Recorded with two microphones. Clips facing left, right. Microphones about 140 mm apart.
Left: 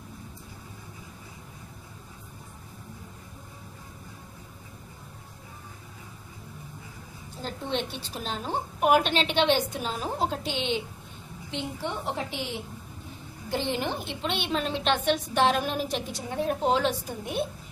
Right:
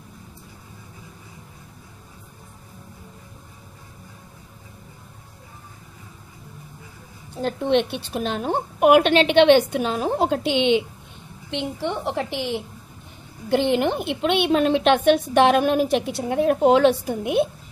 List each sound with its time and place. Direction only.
7.4 s a woman's voice: 65° right (ahead or behind)